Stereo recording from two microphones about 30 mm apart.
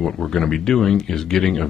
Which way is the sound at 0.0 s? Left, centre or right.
Centre.